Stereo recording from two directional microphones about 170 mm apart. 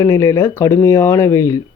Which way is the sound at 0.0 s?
15° left (ahead or behind).